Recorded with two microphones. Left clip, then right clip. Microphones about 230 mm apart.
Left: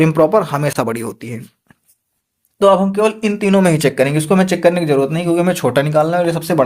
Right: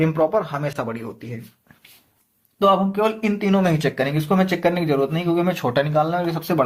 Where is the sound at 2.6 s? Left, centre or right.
Left.